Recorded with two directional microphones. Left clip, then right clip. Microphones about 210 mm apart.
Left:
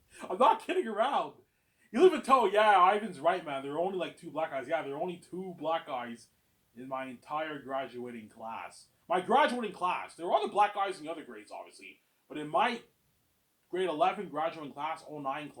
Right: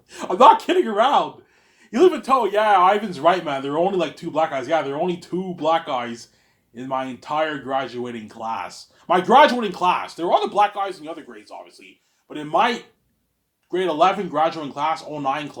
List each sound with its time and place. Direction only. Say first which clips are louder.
0.1 s speech: right 14 dB; 30° right (ahead or behind)